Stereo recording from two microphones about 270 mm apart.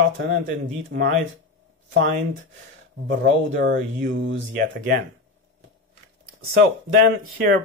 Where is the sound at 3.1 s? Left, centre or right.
Right.